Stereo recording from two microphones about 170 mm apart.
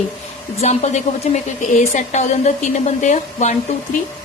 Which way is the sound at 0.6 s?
40° left (ahead or behind).